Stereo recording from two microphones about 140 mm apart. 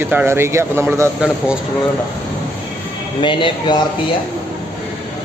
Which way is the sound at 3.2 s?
35° left (ahead or behind).